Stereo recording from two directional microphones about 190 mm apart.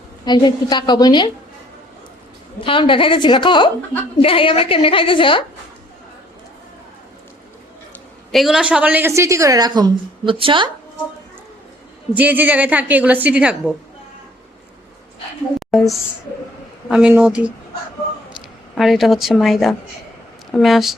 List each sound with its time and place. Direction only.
0.3 s a woman's voice: 20° left (ahead or behind)
2.6 s a woman's voice: 25° left (ahead or behind)
8.3 s a woman's voice: centre (ahead or behind); by 10.7 s 25° right (ahead or behind)
12.1 s a woman's voice: 10° right (ahead or behind)
15.7 s a woman's voice: centre (ahead or behind)
16.9 s a woman's voice: 10° right (ahead or behind)
18.7 s a woman's voice: centre (ahead or behind)